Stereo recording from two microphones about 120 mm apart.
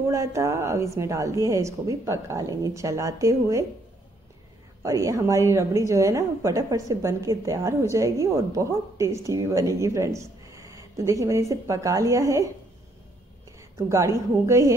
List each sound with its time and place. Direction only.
0.1 s a woman's voice: 25° right (ahead or behind)
4.8 s a woman's voice: 25° right (ahead or behind)
13.6 s a sound: 25° right (ahead or behind)
14.4 s a woman's voice: 25° right (ahead or behind)